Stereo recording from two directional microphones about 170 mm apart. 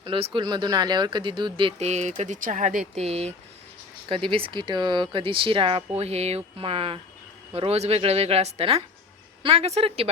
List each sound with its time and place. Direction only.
0.0 s speech: 30° right (ahead or behind)